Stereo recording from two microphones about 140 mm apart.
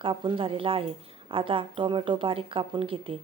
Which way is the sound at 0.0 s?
35° right (ahead or behind).